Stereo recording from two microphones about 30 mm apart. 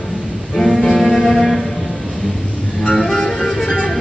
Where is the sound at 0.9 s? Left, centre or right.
Centre.